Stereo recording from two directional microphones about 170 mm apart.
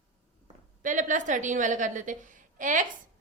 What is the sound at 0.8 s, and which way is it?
A woman's voice, 50° right (ahead or behind).